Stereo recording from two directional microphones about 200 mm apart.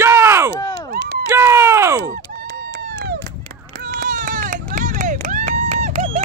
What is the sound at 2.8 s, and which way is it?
Run, 50° right (ahead or behind).